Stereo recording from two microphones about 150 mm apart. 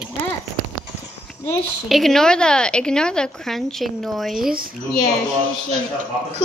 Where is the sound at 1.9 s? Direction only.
Centre (ahead or behind).